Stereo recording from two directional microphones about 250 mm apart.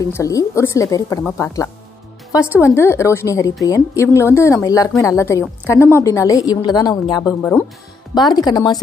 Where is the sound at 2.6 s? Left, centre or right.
Centre.